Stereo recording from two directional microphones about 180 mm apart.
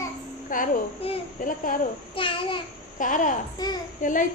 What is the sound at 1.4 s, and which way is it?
Speech, 50° left (ahead or behind).